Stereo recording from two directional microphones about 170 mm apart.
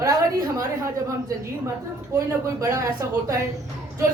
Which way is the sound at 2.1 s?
20° right (ahead or behind).